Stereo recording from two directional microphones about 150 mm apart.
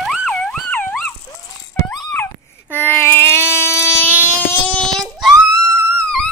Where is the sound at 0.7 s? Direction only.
10° left (ahead or behind).